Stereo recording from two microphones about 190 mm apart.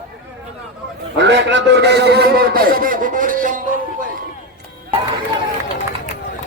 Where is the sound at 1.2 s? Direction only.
70° right (ahead or behind); by 3.6 s 45° right (ahead or behind).